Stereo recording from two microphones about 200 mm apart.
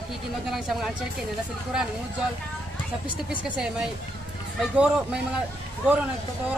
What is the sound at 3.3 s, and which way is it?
Speech, 5° right (ahead or behind).